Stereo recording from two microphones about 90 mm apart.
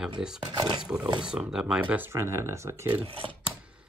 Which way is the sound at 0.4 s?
50° right (ahead or behind).